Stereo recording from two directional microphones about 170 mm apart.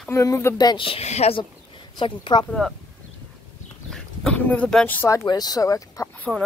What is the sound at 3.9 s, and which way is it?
Speech, 5° left (ahead or behind).